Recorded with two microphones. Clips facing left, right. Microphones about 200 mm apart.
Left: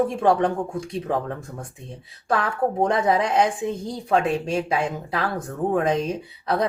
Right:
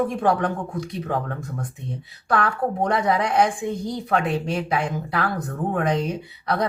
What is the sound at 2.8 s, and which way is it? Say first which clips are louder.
Speech: even; 25° left (ahead or behind).